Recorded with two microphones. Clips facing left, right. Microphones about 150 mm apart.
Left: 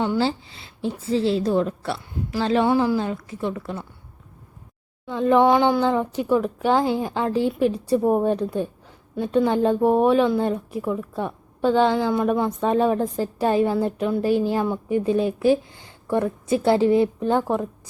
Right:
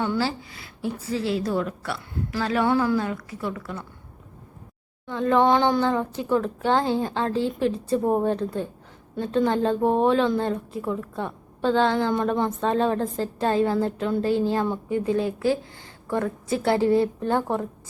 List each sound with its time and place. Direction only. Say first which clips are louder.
0.0 s a woman's voice: left 3 dB; 25° left (ahead or behind)
5.0 s speech: left 3 dB; 15° left (ahead or behind)